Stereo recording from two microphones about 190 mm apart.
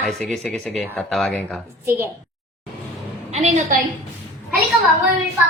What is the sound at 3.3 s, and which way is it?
Speech, 35° right (ahead or behind).